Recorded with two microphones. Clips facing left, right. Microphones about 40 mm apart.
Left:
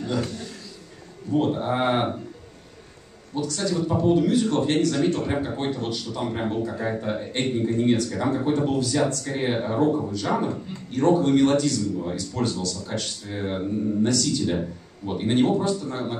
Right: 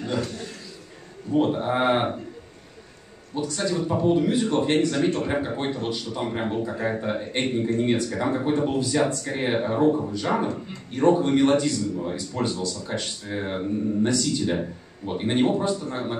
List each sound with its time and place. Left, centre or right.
1.3 s speech: centre
3.5 s a man's voice: right
3.8 s speech: centre
9.2 s speech: centre
10.1 s a man's voice: centre
15.9 s speech: centre